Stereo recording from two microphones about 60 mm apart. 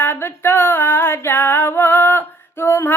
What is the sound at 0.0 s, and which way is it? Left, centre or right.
Female singing, left.